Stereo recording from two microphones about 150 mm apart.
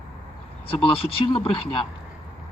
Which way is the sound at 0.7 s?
35° left (ahead or behind).